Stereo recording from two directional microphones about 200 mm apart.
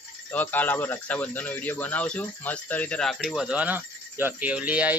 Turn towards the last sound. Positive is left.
turn(degrees=-5)  # may be behind; listen again after turning